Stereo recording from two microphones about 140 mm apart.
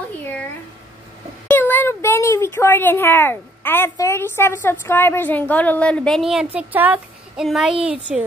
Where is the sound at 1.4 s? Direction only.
15° left (ahead or behind).